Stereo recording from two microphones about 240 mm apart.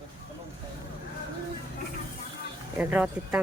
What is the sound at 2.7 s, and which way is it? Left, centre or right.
Speech, centre.